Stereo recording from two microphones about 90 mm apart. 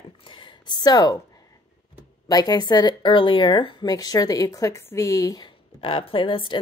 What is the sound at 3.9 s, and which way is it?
Speech, 45° left (ahead or behind).